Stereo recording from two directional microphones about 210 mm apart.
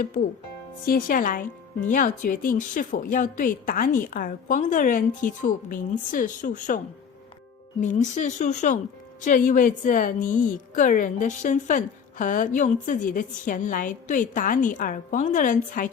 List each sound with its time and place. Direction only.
0.9 s a woman's voice: 40° left (ahead or behind)
7.8 s a woman's voice: 35° left (ahead or behind)